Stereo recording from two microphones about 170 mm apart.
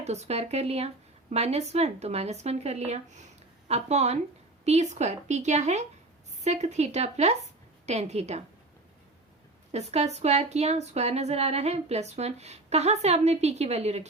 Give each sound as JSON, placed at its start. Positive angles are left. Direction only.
{"t": 0.0, "sound": "a woman's voice", "side_deg": -40}
{"t": 9.7, "sound": "a woman's voice", "side_deg": -40}